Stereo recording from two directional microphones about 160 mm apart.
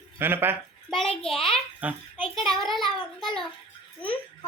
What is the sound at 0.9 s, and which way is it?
Speech, 5° left (ahead or behind).